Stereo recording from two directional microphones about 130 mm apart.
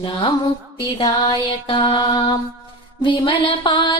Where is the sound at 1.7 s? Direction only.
35° left (ahead or behind).